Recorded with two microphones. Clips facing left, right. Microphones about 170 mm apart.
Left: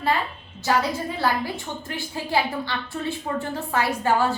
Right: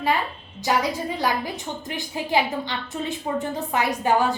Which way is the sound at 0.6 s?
15° right (ahead or behind).